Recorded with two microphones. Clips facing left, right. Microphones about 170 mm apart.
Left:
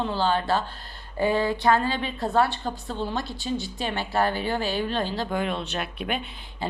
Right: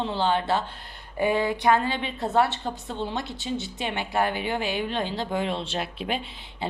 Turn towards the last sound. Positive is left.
turn(degrees=-25)  # may be behind; listen again after turning